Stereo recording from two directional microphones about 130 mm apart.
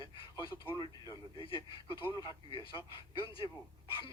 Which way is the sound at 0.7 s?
35° left (ahead or behind).